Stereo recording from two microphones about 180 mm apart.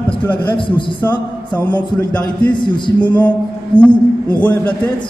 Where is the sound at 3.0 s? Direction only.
10° left (ahead or behind).